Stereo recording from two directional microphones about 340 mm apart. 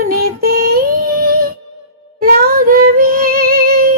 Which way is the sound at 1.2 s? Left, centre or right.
Right.